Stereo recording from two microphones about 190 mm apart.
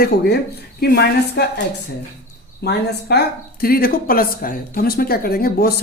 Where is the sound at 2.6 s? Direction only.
60° left (ahead or behind).